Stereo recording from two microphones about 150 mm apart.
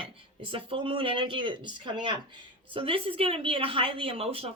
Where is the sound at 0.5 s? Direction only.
35° right (ahead or behind).